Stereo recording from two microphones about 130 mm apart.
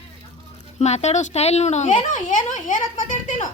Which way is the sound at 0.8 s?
60° left (ahead or behind).